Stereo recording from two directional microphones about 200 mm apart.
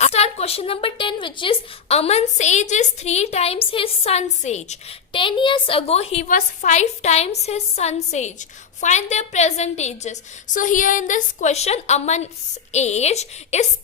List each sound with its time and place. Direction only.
0.0 s speech: 30° left (ahead or behind)